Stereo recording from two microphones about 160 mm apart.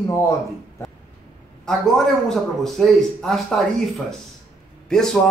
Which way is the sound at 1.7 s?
Centre (ahead or behind).